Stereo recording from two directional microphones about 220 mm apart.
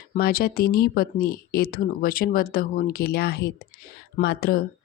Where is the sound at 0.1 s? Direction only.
45° left (ahead or behind).